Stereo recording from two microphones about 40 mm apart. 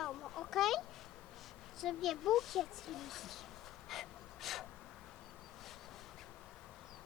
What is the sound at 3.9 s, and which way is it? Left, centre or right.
Breathing, centre.